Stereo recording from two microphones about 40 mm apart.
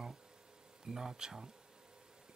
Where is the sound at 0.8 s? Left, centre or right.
Centre.